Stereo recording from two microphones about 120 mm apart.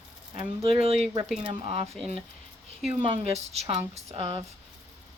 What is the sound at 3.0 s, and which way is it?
A woman's voice, 60° right (ahead or behind).